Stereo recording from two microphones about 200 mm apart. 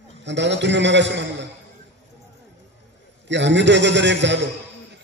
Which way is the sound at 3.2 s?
60° right (ahead or behind).